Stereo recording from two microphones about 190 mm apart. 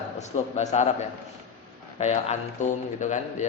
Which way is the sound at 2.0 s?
35° left (ahead or behind).